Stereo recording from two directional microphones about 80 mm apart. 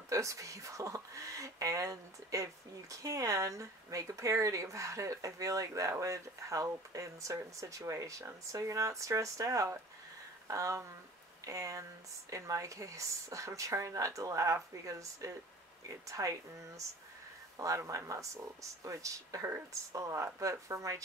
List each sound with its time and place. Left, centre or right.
0.1 s speech: right